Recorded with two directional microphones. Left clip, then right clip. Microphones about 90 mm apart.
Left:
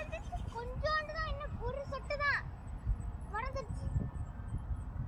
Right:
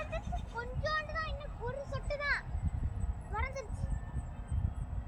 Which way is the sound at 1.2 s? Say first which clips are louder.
Even; 15° left (ahead or behind).